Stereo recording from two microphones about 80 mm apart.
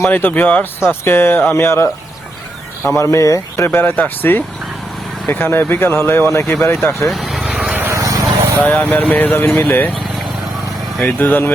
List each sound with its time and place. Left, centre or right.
0.0 s speech: left
3.7 s speech: left
7.0 s speech: centre
7.4 s vehicle: centre
7.9 s vehicle: right
8.6 s speech: centre
11.0 s speech: left